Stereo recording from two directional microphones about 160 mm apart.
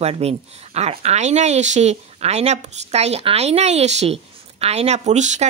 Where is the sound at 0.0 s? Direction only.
40° right (ahead or behind).